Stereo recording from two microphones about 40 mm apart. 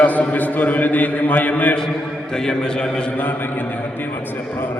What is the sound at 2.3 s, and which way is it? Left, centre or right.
Speech, centre.